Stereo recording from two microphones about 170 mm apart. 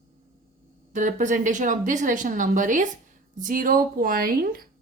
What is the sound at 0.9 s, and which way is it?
A woman's voice, 45° right (ahead or behind).